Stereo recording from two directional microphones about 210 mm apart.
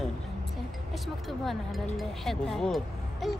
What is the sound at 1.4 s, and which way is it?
Speech, centre (ahead or behind).